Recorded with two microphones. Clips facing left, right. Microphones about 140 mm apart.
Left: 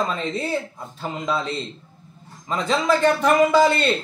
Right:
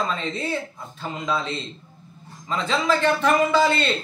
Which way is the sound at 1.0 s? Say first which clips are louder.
Left 2 dB; 35° left (ahead or behind).